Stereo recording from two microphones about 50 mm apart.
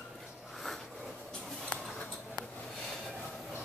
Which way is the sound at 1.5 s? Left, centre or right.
Centre.